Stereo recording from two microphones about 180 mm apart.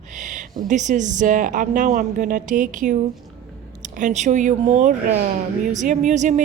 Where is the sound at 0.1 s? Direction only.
45° right (ahead or behind).